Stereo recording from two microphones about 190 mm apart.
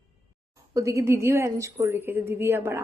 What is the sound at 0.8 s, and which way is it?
A woman's voice, 15° right (ahead or behind).